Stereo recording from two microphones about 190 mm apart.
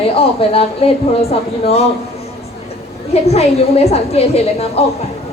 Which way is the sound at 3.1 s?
35° left (ahead or behind).